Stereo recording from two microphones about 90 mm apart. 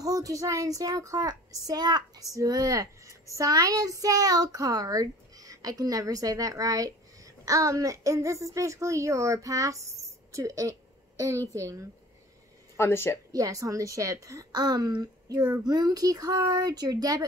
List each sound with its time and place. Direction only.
0.0 s a child's voice: 40° right (ahead or behind)
12.7 s speech: 30° left (ahead or behind)
13.3 s a woman's voice: 40° right (ahead or behind)